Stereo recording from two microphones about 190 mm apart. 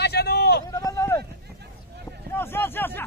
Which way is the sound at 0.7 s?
15° left (ahead or behind).